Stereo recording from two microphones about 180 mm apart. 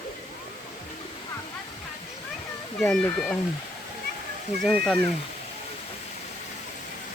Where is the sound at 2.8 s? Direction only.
5° left (ahead or behind).